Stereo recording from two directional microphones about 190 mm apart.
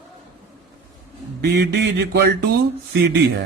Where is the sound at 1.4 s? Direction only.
60° right (ahead or behind).